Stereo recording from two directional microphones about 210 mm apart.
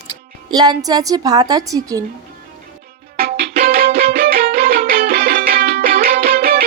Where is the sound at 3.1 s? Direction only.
45° right (ahead or behind).